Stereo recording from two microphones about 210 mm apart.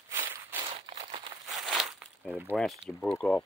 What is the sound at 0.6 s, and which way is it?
Crumpling, 25° right (ahead or behind).